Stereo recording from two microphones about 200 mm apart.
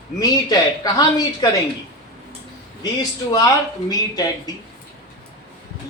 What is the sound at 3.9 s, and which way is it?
Speech, 20° left (ahead or behind).